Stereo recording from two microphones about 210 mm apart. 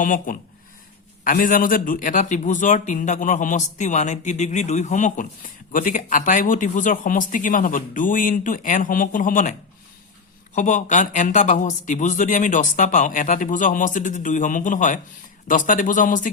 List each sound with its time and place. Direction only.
0.0 s a man's voice: 40° left (ahead or behind)